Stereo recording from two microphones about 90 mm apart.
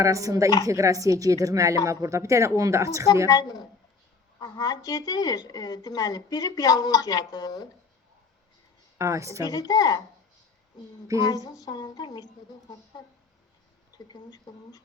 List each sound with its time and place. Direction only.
0.0 s a woman's voice: 40° right (ahead or behind)
3.2 s speech: 45° left (ahead or behind)
9.0 s a woman's voice: 35° right (ahead or behind)
9.5 s speech: 45° left (ahead or behind)
11.4 s speech: 45° left (ahead or behind)
14.1 s speech: 50° left (ahead or behind)